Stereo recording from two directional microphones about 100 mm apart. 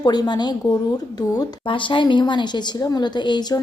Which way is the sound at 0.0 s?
45° left (ahead or behind).